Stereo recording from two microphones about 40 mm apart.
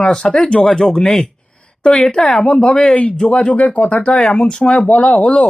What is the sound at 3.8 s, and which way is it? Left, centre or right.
Speech, left.